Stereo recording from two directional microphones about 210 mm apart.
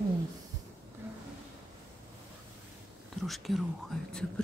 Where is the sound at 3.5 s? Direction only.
Centre (ahead or behind).